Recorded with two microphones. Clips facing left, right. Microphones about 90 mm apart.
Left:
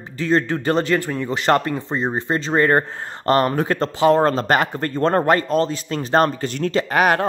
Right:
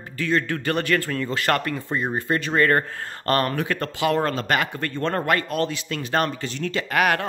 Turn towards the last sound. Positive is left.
turn(degrees=30)  # may be behind; listen again after turning